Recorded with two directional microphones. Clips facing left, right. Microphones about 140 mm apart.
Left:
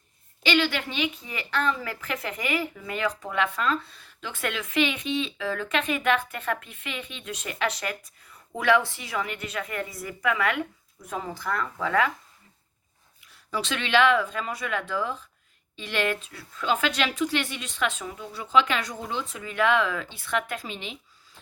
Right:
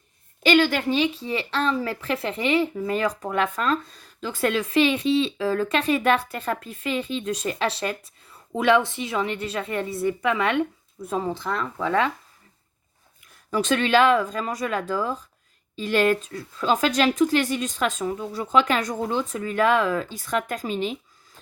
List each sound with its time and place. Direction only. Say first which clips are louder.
0.4 s a woman's voice: right 6 dB; 45° right (ahead or behind); by 12.1 s 25° right (ahead or behind)
13.2 s speech: right 7 dB; 45° right (ahead or behind)